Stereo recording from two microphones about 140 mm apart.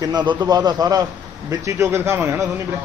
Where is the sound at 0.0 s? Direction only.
30° right (ahead or behind).